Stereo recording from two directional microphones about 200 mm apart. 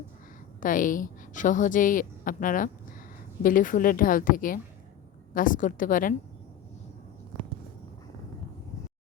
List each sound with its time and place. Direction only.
0.6 s a woman's voice: 40° left (ahead or behind)